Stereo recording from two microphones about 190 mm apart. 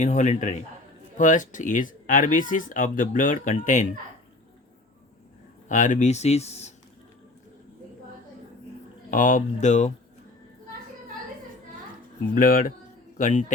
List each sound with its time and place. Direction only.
0.0 s speech: 40° left (ahead or behind)
5.6 s speech: 40° left (ahead or behind)
9.0 s speech: 45° left (ahead or behind)
12.3 s speech: 45° left (ahead or behind)